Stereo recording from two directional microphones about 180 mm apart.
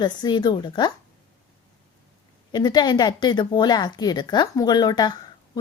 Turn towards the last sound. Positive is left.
turn(degrees=20)  # may be behind; listen again after turning